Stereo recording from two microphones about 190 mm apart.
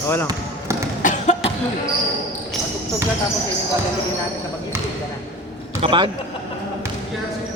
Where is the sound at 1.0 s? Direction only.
40° left (ahead or behind).